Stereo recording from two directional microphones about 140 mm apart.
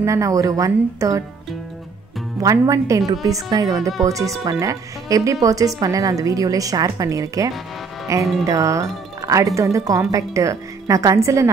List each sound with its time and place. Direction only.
0.0 s a woman's voice: 20° right (ahead or behind)
2.4 s a woman's voice: 25° right (ahead or behind)
9.2 s music: 25° right (ahead or behind)
9.6 s a woman's voice: 20° right (ahead or behind)